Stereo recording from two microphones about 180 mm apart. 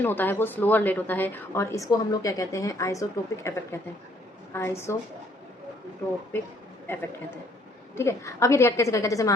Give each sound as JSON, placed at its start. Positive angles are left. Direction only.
{"t": 0.0, "sound": "a woman's voice", "side_deg": 10}
{"t": 6.8, "sound": "a man's voice", "side_deg": 10}